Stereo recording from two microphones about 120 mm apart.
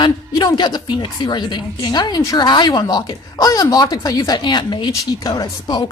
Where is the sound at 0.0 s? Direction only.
35° left (ahead or behind).